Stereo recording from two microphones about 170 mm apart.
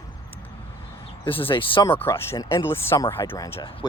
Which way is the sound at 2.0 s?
15° left (ahead or behind).